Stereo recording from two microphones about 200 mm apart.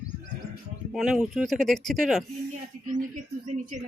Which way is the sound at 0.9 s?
Centre (ahead or behind).